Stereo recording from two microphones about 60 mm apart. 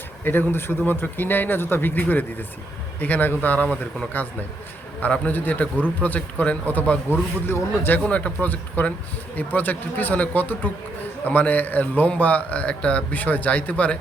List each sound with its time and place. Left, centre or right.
0.3 s a man's voice: left
7.1 s speech: left
8.0 s a man's voice: left